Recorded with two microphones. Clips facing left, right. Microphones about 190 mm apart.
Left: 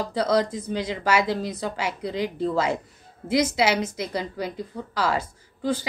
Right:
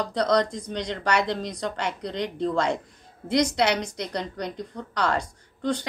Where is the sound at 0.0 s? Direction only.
5° left (ahead or behind).